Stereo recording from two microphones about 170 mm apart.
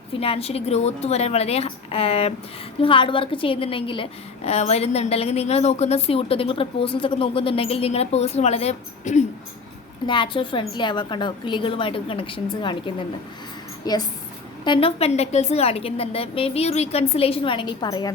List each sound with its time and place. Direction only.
0.1 s a woman's voice: 35° left (ahead or behind)
10.1 s a woman's voice: 30° left (ahead or behind)